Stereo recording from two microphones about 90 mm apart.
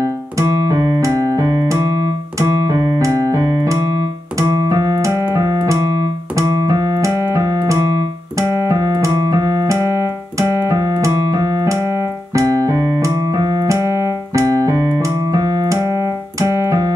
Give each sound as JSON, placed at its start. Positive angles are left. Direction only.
{"t": 0.0, "sound": "keyboard", "side_deg": -40}
{"t": 4.5, "sound": "music", "side_deg": -40}
{"t": 6.7, "sound": "keyboard", "side_deg": -35}